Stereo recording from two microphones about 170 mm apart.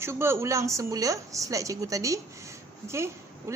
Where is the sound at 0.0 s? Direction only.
15° right (ahead or behind).